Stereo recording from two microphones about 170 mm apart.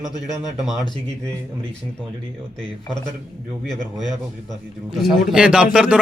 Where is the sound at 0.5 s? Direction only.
Centre (ahead or behind).